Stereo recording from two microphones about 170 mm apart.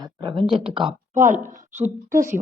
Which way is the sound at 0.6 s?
30° right (ahead or behind).